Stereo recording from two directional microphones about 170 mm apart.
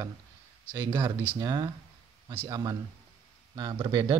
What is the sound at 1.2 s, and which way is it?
Speech, 25° right (ahead or behind).